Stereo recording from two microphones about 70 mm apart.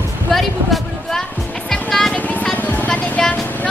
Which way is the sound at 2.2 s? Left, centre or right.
Left.